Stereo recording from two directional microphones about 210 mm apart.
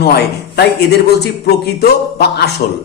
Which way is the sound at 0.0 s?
50° left (ahead or behind).